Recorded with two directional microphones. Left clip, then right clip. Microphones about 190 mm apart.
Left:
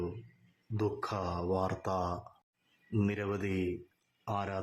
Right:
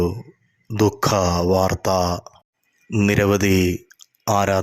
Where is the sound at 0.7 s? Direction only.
35° right (ahead or behind).